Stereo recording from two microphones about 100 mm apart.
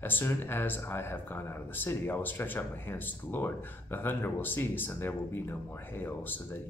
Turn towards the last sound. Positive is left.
turn(degrees=20)  # may be behind; listen again after turning